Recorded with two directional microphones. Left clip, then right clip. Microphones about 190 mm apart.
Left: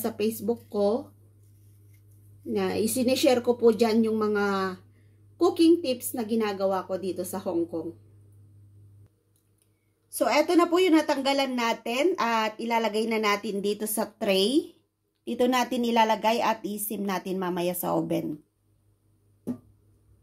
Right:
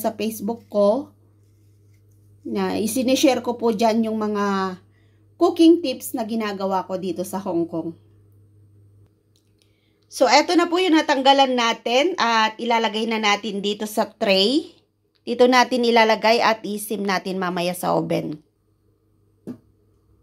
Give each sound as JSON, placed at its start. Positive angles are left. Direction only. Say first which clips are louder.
{"t": 0.0, "sound": "a woman's voice", "louder": "right 3 dB", "side_deg": -35}
{"t": 2.5, "sound": "a woman's voice", "louder": "right 3 dB", "side_deg": -40}
{"t": 10.0, "sound": "a woman's voice", "louder": "right 7 dB", "side_deg": -15}